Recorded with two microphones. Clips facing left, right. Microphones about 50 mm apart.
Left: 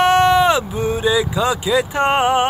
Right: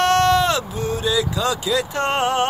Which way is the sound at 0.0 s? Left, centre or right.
Centre.